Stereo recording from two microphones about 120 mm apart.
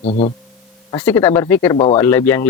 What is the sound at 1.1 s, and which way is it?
A man's voice, 20° left (ahead or behind).